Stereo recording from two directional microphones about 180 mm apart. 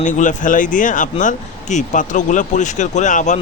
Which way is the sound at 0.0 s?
45° left (ahead or behind).